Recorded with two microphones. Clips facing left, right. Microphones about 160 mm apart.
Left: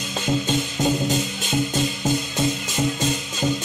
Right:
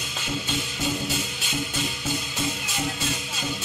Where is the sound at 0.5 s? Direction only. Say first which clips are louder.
Left 7 dB; 40° left (ahead or behind).